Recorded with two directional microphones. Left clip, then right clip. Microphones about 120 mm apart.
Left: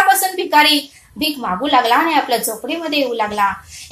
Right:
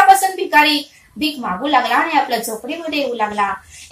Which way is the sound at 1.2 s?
35° left (ahead or behind).